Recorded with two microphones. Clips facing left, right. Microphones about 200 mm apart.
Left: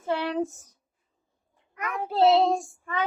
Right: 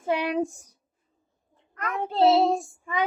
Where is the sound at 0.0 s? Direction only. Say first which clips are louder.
Right 2 dB; 15° right (ahead or behind).